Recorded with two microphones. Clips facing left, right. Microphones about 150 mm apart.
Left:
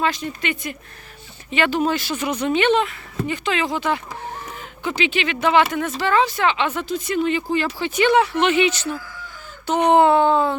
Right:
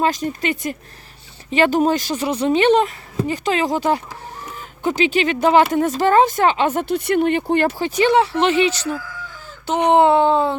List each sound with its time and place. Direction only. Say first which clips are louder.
0.0 s speech: right 4 dB; 40° right (ahead or behind)
6.8 s speech: right 4 dB; 65° right (ahead or behind)
7.9 s speech: left 1 dB; 35° right (ahead or behind)